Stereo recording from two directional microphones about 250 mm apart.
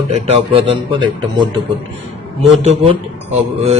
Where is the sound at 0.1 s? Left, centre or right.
Right.